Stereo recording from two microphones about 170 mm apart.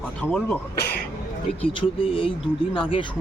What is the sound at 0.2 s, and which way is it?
Speech, 5° left (ahead or behind).